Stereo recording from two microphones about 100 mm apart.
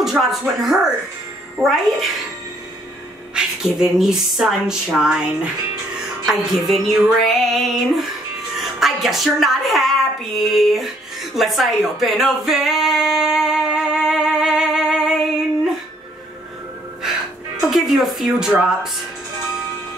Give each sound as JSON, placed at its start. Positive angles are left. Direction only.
{"t": 0.0, "sound": "speech", "side_deg": 0}
{"t": 3.3, "sound": "a woman's voice", "side_deg": -5}
{"t": 11.3, "sound": "a sound", "side_deg": 0}
{"t": 17.6, "sound": "speech", "side_deg": -5}